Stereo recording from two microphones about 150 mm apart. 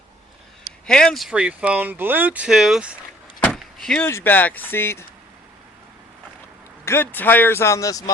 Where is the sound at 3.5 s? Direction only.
5° left (ahead or behind).